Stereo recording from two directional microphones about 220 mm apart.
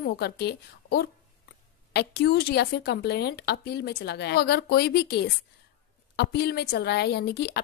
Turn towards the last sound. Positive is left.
turn(degrees=50)  # may be behind; listen again after turning